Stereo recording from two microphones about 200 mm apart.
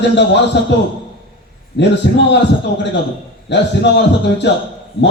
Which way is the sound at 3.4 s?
60° left (ahead or behind).